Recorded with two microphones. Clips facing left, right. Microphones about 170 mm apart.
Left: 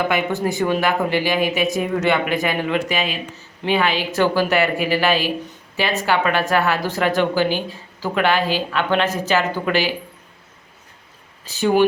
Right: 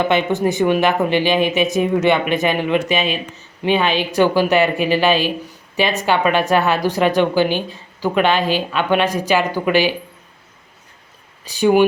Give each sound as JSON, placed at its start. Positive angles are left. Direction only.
{"t": 0.1, "sound": "speech", "side_deg": -20}
{"t": 11.4, "sound": "speech", "side_deg": -15}